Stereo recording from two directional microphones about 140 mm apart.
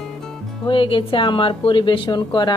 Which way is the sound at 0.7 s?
40° left (ahead or behind).